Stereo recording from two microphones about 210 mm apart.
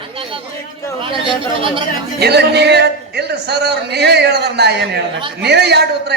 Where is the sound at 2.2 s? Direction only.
50° right (ahead or behind).